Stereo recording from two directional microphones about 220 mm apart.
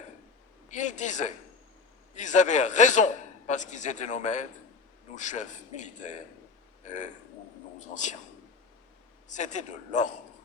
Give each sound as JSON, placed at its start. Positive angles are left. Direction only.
{"t": 0.7, "sound": "a man's voice", "side_deg": 35}
{"t": 9.3, "sound": "a man's voice", "side_deg": 35}